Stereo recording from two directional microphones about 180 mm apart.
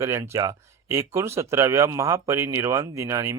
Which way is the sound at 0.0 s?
15° right (ahead or behind).